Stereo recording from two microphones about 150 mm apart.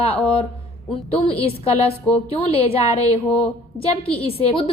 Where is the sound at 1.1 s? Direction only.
40° left (ahead or behind).